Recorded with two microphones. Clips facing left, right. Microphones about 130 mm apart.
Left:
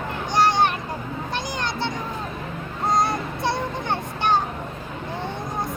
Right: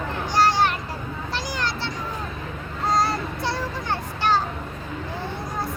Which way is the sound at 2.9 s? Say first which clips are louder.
Even; 20° left (ahead or behind).